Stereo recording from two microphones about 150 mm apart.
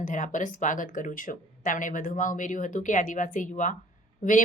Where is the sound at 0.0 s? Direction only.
60° left (ahead or behind).